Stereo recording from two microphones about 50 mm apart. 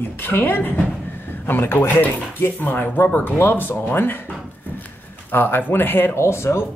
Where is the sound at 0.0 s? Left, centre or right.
Left.